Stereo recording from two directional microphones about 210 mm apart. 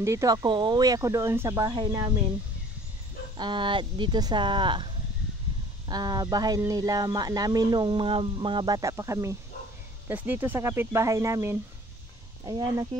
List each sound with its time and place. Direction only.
0.0 s speech: 15° right (ahead or behind)
3.3 s speech: 20° right (ahead or behind)
5.9 s speech: 20° right (ahead or behind)